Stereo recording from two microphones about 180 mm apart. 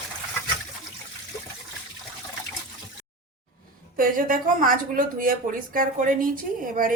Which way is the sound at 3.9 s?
50° right (ahead or behind).